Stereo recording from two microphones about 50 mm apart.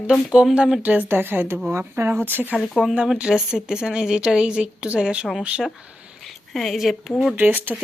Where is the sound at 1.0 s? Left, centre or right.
Right.